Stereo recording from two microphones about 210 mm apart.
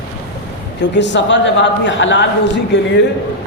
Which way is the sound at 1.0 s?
60° left (ahead or behind).